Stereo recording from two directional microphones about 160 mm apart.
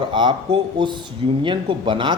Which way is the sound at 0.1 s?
30° right (ahead or behind).